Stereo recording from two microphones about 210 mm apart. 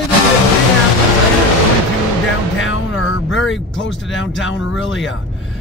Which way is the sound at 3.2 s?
65° left (ahead or behind).